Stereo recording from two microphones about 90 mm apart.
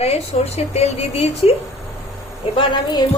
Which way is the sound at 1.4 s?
15° right (ahead or behind).